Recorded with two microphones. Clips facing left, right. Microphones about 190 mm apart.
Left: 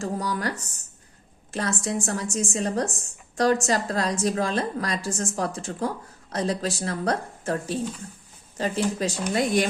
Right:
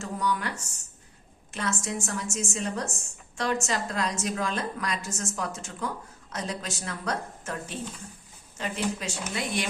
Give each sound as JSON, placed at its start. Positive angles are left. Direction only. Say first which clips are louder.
{"t": 0.0, "sound": "a woman's voice", "louder": "left 2 dB", "side_deg": 35}